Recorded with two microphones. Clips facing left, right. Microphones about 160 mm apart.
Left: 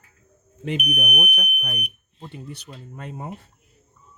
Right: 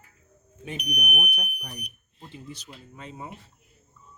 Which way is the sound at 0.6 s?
90° left.